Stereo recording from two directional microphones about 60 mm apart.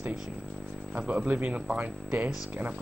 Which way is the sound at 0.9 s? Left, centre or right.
Right.